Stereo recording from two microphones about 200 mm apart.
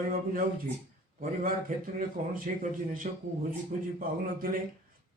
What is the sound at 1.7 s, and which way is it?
A man's voice, 45° right (ahead or behind).